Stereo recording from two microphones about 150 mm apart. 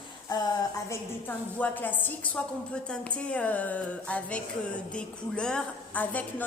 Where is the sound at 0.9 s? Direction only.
10° left (ahead or behind).